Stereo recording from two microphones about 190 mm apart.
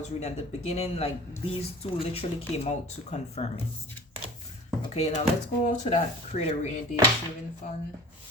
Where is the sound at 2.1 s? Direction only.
35° left (ahead or behind).